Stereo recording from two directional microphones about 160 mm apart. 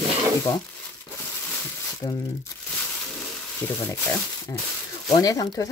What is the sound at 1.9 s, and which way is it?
Speech, 20° left (ahead or behind).